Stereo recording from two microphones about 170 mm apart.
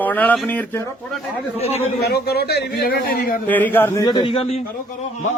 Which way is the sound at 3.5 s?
10° left (ahead or behind).